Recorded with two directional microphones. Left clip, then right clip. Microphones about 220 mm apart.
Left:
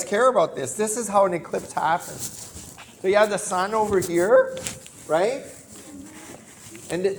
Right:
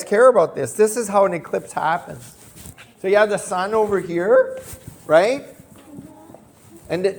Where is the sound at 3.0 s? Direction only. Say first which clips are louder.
Right 3 dB; 55° right (ahead or behind).